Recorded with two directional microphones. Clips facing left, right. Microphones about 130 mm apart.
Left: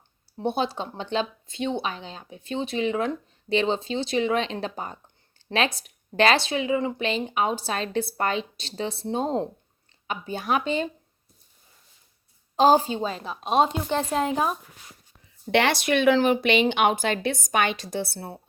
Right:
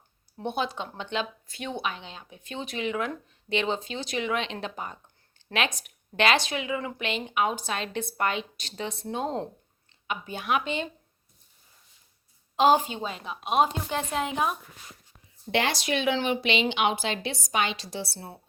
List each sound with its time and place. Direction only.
0.3 s speech: 30° left (ahead or behind)
12.5 s speech: 35° left (ahead or behind)
15.5 s speech: 65° left (ahead or behind)